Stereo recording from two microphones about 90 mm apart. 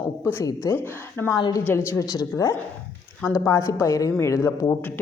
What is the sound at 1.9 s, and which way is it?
A woman's voice, 40° left (ahead or behind).